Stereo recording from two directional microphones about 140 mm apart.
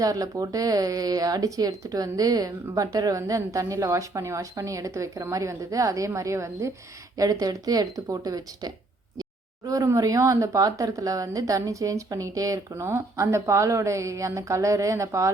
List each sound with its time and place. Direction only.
0.0 s speech: 25° right (ahead or behind)